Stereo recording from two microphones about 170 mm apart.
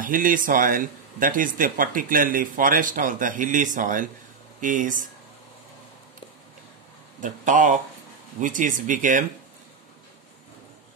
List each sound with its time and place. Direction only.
0.0 s speech: 55° right (ahead or behind)
7.2 s speech: 50° right (ahead or behind)